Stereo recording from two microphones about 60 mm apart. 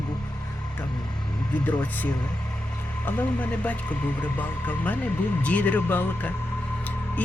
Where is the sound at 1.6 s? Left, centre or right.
Left.